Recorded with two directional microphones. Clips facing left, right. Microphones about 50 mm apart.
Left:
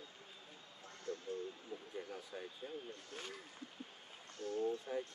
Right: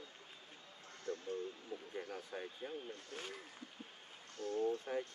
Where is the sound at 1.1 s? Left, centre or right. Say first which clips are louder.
Right 1 dB; right.